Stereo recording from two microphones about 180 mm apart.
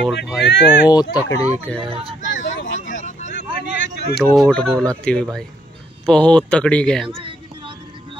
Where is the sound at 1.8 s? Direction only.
30° right (ahead or behind).